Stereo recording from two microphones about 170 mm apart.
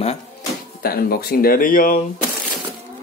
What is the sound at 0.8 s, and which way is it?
Speech, 65° left (ahead or behind).